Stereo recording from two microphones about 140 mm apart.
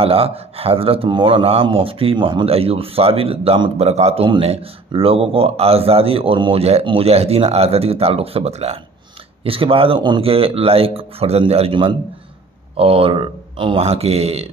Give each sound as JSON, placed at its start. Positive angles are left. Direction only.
{"t": 0.0, "sound": "speech", "side_deg": -45}